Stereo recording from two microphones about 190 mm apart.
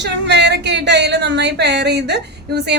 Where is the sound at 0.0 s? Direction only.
65° right (ahead or behind).